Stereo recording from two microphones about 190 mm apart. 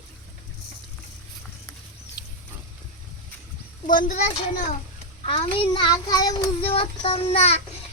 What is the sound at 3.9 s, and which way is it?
Speech, 40° left (ahead or behind).